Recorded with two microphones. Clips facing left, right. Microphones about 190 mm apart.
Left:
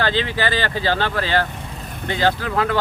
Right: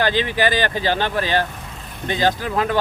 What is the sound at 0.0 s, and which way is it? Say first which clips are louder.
Speech: right 2 dB; 15° right (ahead or behind).